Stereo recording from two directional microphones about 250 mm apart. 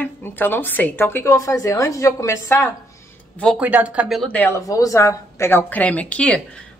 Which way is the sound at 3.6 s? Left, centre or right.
Centre.